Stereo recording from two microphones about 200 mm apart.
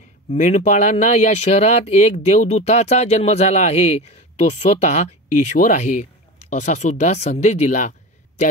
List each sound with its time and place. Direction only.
0.3 s speech: 35° left (ahead or behind)